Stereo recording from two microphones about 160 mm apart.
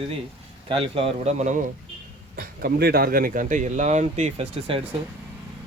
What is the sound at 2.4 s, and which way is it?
Speech, 70° right (ahead or behind).